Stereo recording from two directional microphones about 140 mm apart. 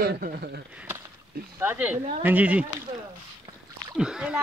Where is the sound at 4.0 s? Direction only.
5° right (ahead or behind).